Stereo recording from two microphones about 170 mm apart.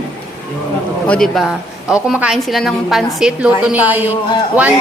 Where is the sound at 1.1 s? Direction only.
Centre (ahead or behind).